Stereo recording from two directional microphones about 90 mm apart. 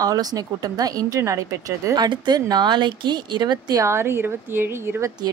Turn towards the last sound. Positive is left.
turn(degrees=-25)  # may be behind; listen again after turning